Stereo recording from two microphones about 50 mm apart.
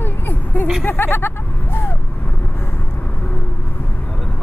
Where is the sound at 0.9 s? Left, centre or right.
Left.